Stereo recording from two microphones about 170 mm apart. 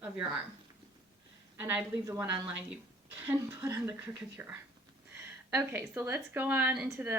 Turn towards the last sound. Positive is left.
turn(degrees=-10)  # may be behind; listen again after turning